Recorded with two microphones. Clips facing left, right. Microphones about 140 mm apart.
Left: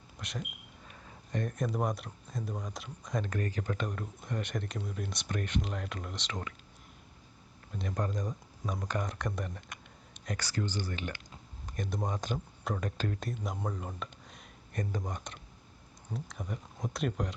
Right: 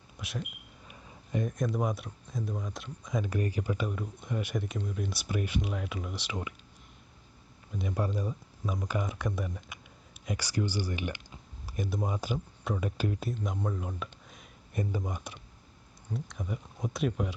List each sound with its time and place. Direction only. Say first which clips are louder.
0.2 s speech: right 2 dB; 5° right (ahead or behind)
7.7 s speech: right 2 dB; 5° right (ahead or behind)